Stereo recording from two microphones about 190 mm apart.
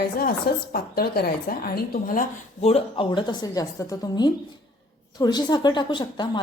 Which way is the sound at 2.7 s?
25° left (ahead or behind).